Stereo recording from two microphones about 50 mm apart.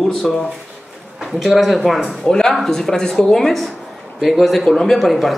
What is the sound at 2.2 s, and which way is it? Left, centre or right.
A man's voice, centre.